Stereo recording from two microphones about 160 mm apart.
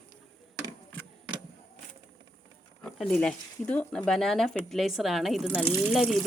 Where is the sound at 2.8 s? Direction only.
5° left (ahead or behind).